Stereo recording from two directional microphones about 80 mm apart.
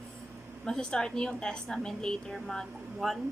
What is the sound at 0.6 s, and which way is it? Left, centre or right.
A woman's voice, centre.